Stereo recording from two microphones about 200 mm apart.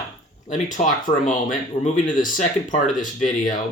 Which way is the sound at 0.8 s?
40° left (ahead or behind).